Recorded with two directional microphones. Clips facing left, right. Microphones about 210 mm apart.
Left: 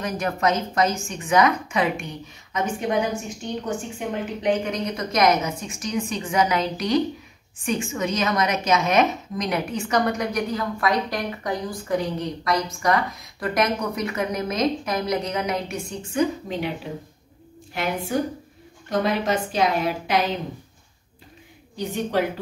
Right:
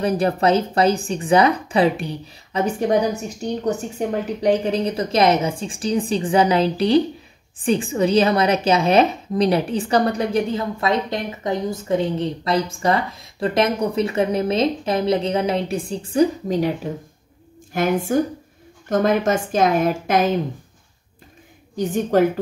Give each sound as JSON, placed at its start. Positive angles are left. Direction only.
{"t": 0.0, "sound": "a woman's voice", "side_deg": -35}
{"t": 21.7, "sound": "a woman's voice", "side_deg": -45}